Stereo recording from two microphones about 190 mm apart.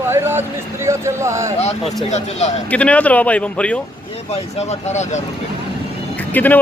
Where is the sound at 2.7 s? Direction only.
5° left (ahead or behind).